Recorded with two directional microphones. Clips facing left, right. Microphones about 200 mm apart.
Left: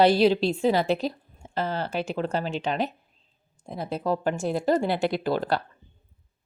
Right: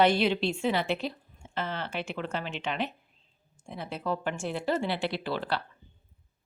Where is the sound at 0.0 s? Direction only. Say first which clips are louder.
Left 5 dB; 35° left (ahead or behind).